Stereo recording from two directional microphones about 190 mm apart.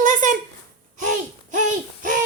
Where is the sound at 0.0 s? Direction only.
40° right (ahead or behind).